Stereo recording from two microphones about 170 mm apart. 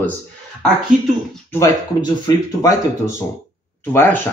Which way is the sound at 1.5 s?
15° left (ahead or behind).